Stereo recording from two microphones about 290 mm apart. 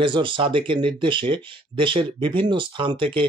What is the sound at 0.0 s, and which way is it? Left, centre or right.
Speech, centre.